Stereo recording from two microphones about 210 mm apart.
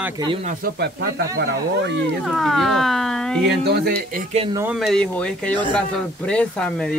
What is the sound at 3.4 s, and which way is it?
Speech, 50° right (ahead or behind).